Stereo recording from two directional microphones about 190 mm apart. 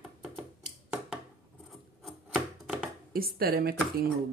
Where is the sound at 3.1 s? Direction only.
50° right (ahead or behind).